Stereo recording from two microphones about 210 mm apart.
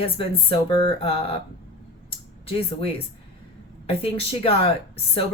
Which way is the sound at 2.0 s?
25° left (ahead or behind).